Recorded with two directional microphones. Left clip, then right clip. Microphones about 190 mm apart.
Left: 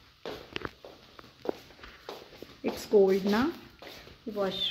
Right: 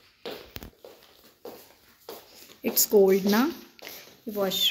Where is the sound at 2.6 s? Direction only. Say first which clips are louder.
Right 3 dB; 10° right (ahead or behind).